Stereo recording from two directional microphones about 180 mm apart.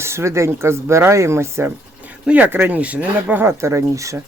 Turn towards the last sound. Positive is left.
turn(degrees=-15)  # may be behind; listen again after turning